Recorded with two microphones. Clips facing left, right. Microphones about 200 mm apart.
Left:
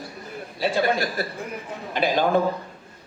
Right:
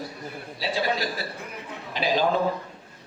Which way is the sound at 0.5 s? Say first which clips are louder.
Left 5 dB; 50° left (ahead or behind).